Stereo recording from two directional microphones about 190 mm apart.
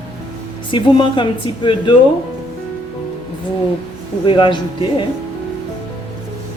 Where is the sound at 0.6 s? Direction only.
25° left (ahead or behind).